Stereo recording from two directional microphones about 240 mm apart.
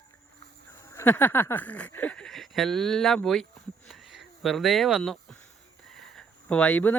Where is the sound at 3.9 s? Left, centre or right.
Centre.